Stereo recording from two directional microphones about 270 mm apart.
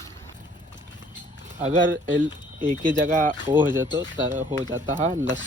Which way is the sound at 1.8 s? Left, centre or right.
Right.